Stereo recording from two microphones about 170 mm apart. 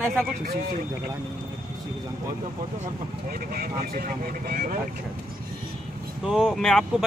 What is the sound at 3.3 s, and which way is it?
Speech, 60° right (ahead or behind).